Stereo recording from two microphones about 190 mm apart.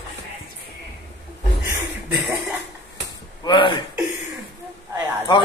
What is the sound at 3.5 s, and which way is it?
Speech, 25° left (ahead or behind).